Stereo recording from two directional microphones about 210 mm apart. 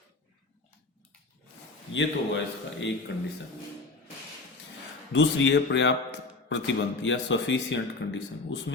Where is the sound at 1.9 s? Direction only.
60° left (ahead or behind).